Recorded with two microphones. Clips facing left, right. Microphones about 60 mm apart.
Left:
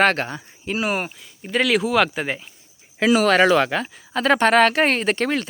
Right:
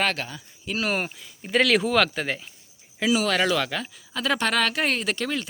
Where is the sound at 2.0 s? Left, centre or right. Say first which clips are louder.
Left 3 dB; centre.